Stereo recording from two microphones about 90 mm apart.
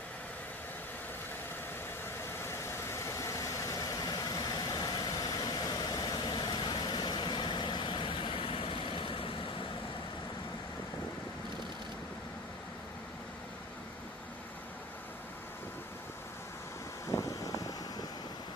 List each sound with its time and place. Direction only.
2.9 s vehicle: 30° left (ahead or behind); by 9.3 s 75° left (ahead or behind)
17.1 s vehicle: 40° left (ahead or behind)